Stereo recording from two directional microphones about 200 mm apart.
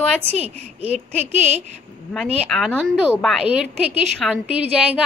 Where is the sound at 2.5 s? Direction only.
Centre (ahead or behind).